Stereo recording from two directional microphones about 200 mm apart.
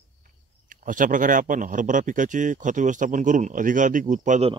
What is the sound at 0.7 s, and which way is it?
Speech, 40° right (ahead or behind).